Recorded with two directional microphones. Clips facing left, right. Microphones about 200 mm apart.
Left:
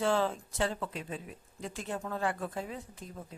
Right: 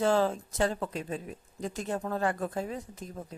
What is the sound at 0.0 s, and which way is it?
Speech, 40° right (ahead or behind).